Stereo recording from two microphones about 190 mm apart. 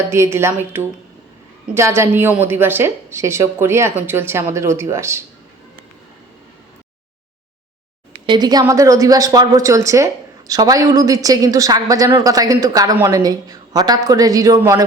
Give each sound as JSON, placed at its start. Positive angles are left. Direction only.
{"t": 0.1, "sound": "speech", "side_deg": -15}
{"t": 8.3, "sound": "speech", "side_deg": -20}